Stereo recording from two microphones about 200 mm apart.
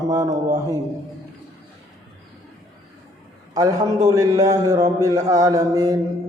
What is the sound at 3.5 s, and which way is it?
Speech, 15° right (ahead or behind).